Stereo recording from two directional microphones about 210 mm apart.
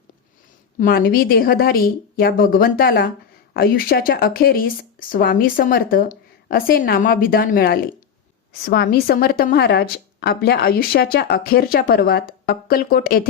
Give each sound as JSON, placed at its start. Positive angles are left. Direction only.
{"t": 0.8, "sound": "a woman's voice", "side_deg": 45}